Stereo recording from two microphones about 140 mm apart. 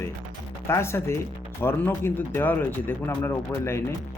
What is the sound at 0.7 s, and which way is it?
Speech, 20° left (ahead or behind).